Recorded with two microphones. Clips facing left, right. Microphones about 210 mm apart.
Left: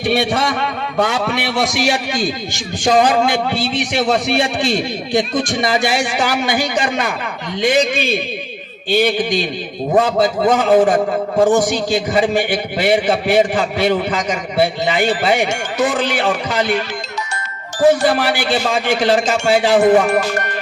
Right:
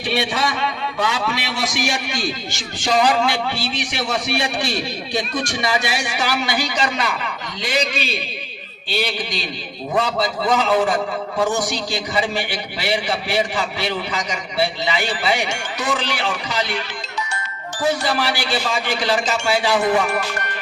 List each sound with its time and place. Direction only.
0.0 s a man's voice: 55° left (ahead or behind)